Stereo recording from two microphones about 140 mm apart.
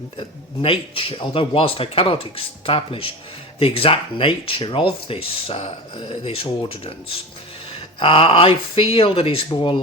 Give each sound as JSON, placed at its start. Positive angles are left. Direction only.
{"t": 0.2, "sound": "speech", "side_deg": 40}